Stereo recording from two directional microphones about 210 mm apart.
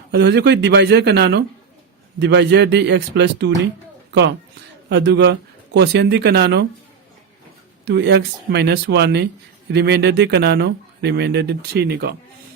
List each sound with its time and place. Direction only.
0.1 s speech: 55° right (ahead or behind)
4.9 s speech: 55° right (ahead or behind)
7.9 s speech: 55° right (ahead or behind)